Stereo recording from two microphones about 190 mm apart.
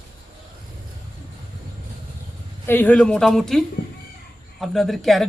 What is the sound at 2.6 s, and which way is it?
Speech, 10° left (ahead or behind).